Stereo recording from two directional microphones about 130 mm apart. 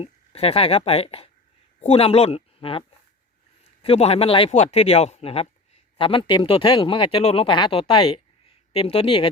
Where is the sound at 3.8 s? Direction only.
50° left (ahead or behind).